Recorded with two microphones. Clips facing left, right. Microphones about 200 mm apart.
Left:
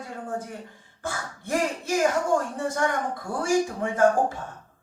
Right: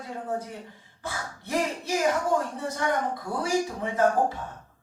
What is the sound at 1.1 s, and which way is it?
Speech, 50° left (ahead or behind).